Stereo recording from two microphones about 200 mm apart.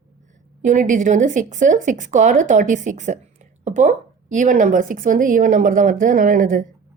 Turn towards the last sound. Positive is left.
turn(degrees=-45)  # may be behind; listen again after turning